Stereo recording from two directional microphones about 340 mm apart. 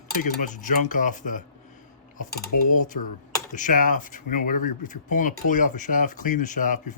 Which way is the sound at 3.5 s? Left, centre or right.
Left.